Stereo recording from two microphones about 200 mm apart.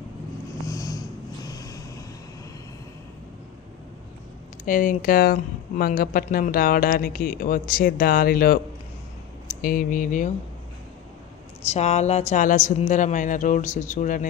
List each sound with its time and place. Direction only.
0.7 s a sound: 15° left (ahead or behind)
4.6 s speech: 40° left (ahead or behind)
11.7 s speech: 35° left (ahead or behind)